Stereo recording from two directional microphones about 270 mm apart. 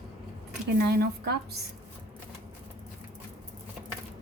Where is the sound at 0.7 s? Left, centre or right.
Right.